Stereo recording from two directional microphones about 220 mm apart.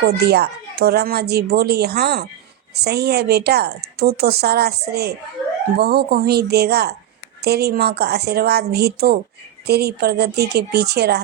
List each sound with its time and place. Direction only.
0.0 s a woman's voice: 45° right (ahead or behind)